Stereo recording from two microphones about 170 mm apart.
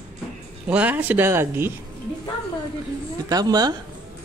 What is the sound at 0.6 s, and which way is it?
Speech, 10° right (ahead or behind).